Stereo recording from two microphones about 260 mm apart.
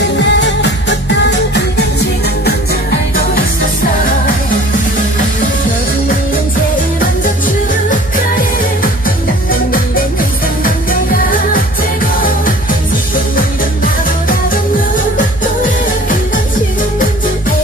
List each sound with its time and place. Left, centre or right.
0.2 s music: left